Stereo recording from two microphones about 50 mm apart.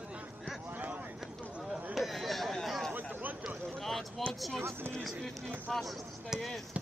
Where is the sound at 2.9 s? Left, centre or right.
Right.